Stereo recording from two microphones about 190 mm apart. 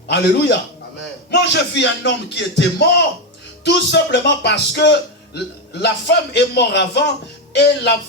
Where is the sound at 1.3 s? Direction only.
65° left (ahead or behind).